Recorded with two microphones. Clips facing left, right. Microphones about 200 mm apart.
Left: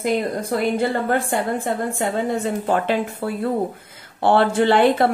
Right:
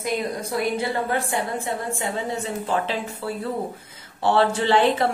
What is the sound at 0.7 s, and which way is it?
A woman's voice, 50° left (ahead or behind).